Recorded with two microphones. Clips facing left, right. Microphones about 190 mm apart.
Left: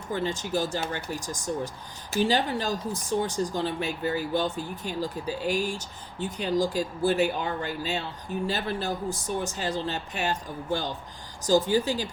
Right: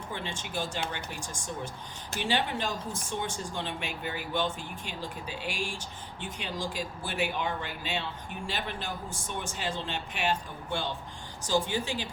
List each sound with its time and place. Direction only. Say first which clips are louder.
0.1 s speech: left 10 dB; 40° left (ahead or behind)